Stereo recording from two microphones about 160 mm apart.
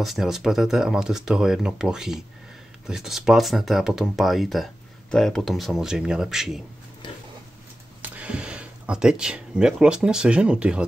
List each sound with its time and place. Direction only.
0.0 s speech: centre (ahead or behind)
7.0 s a sound: 30° left (ahead or behind)
8.0 s speech: 5° right (ahead or behind)